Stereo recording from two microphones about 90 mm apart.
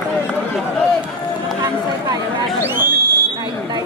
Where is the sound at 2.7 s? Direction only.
25° right (ahead or behind).